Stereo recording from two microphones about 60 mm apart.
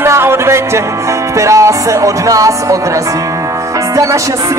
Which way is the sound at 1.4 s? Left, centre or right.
Right.